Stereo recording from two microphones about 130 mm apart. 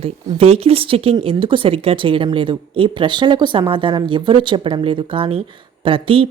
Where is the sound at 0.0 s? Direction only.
50° right (ahead or behind).